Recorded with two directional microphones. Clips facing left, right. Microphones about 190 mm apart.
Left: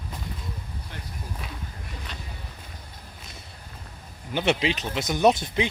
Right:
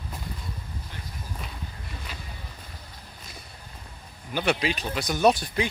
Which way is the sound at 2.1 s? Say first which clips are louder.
Left 1 dB; 5° right (ahead or behind).